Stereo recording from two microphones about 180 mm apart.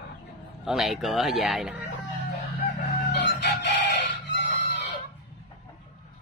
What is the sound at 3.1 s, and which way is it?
Crowing, 75° left (ahead or behind).